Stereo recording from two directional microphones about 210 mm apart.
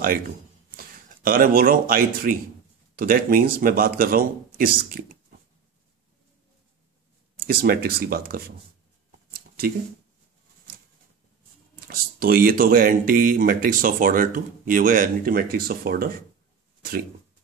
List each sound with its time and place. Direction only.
0.7 s a man's voice: 45° right (ahead or behind)
7.3 s a man's voice: 45° right (ahead or behind)
11.9 s speech: 45° right (ahead or behind)